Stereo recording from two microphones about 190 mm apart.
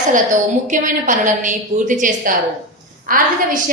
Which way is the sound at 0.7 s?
45° right (ahead or behind).